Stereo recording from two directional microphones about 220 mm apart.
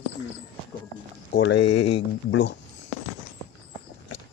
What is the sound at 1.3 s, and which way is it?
Speech, 55° left (ahead or behind).